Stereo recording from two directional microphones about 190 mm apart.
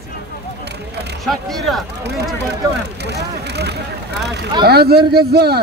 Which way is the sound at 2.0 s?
60° right (ahead or behind).